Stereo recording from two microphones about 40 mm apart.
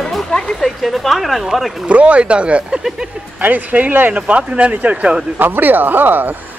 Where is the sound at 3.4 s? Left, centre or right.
Right.